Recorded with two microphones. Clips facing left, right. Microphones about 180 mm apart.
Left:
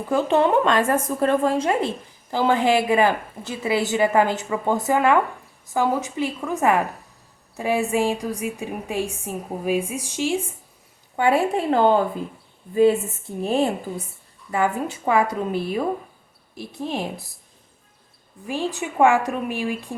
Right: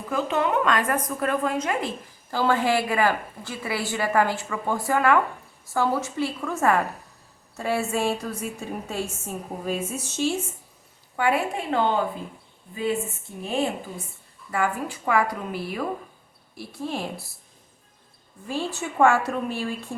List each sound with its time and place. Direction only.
0.1 s a woman's voice: 30° left (ahead or behind)
2.3 s a woman's voice: 20° left (ahead or behind)
11.2 s a woman's voice: 25° left (ahead or behind)
11.7 s a woman's voice: 40° left (ahead or behind)
14.5 s a woman's voice: 20° left (ahead or behind)
18.4 s a woman's voice: 15° left (ahead or behind)